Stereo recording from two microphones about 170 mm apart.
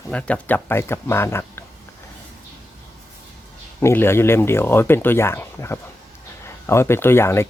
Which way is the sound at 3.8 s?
15° left (ahead or behind).